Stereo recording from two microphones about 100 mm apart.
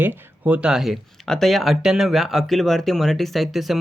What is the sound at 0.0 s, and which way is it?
Speech, 20° right (ahead or behind).